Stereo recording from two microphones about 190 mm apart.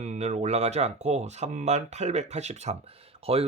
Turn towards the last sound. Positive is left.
turn(degrees=-30)  # may be behind; listen again after turning